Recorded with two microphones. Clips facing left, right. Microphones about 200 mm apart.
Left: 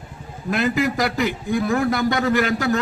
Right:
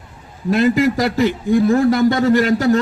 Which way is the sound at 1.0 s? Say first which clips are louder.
Right 5 dB; 30° right (ahead or behind).